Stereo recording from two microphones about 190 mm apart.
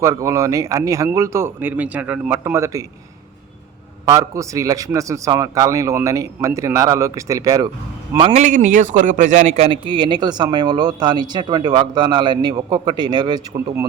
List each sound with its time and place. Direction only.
0.0 s a man's voice: 15° right (ahead or behind)
4.1 s a man's voice: 15° right (ahead or behind)
8.2 s a man's voice: 35° right (ahead or behind)